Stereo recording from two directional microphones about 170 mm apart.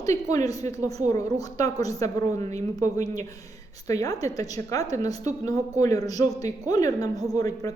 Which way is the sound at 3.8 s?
20° left (ahead or behind).